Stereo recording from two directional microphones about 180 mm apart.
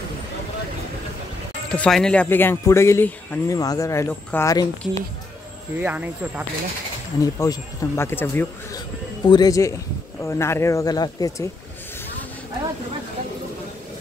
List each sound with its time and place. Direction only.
1.7 s speech: 5° left (ahead or behind); by 5.0 s 20° left (ahead or behind)
5.8 s speech: 10° right (ahead or behind)
7.2 s speech: 20° left (ahead or behind)
9.2 s speech: 25° left (ahead or behind)